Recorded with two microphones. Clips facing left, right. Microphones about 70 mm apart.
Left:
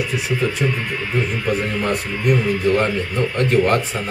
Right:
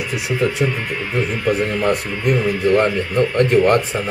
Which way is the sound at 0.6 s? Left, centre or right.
Centre.